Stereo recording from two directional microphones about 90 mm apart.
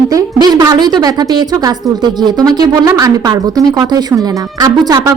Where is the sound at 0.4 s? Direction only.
50° right (ahead or behind).